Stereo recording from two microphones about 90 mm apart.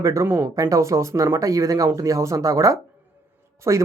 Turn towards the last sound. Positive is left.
turn(degrees=-35)  # may be behind; listen again after turning